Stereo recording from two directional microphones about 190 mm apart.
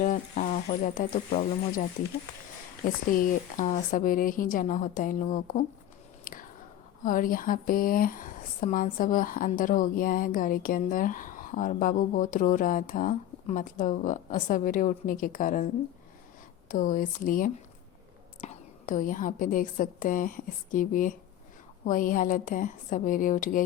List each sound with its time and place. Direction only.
0.0 s speech: 40° left (ahead or behind)
2.8 s speech: 45° left (ahead or behind)
6.3 s whispering: 45° left (ahead or behind)
7.0 s speech: 45° left (ahead or behind)
16.6 s speech: 45° left (ahead or behind)